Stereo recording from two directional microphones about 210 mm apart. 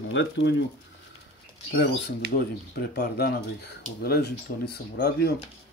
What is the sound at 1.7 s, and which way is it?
Speech, 50° left (ahead or behind).